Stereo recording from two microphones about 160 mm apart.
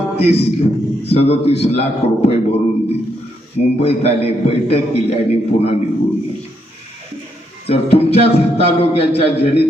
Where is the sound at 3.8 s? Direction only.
40° left (ahead or behind).